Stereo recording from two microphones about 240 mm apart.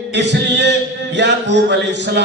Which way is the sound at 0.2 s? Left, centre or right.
Right.